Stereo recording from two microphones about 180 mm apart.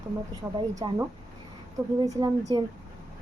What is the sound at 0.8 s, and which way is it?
Speech, 25° right (ahead or behind).